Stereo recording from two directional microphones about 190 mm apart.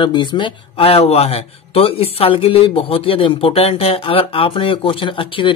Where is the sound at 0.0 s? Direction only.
25° left (ahead or behind).